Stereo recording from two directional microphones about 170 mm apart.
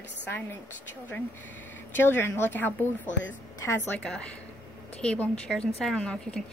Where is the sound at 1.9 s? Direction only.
15° left (ahead or behind).